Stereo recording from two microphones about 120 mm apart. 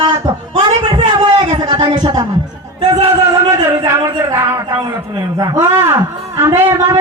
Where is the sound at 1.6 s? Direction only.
35° right (ahead or behind).